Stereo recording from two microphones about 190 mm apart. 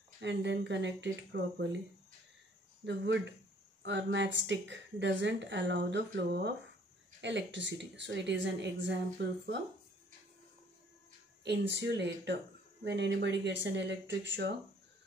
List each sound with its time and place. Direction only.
0.2 s speech: 65° right (ahead or behind)
2.8 s speech: 70° right (ahead or behind)
11.4 s speech: 65° right (ahead or behind)